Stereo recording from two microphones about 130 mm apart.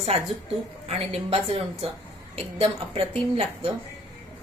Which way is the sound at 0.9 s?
50° right (ahead or behind).